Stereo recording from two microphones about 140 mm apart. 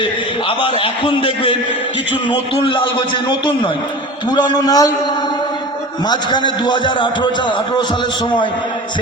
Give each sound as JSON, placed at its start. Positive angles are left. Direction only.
{"t": 0.0, "sound": "a man's voice", "side_deg": 40}
{"t": 6.1, "sound": "a man's voice", "side_deg": 35}